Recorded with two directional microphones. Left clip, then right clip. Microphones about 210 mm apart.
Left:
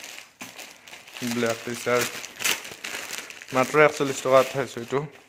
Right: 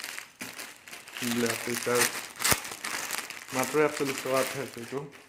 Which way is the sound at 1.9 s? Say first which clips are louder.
Left 4 dB; 30° left (ahead or behind).